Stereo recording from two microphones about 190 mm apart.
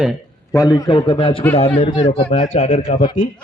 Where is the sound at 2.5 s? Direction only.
40° left (ahead or behind).